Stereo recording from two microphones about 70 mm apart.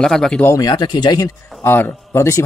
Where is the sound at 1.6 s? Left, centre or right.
Left.